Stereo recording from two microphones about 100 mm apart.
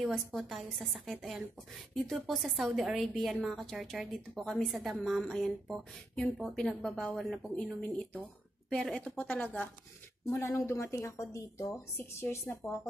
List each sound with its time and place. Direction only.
0.0 s speech: 5° right (ahead or behind); by 9.7 s 15° left (ahead or behind)
10.3 s a woman's voice: 30° left (ahead or behind)